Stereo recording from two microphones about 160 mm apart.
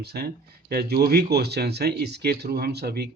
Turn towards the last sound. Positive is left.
turn(degrees=-85)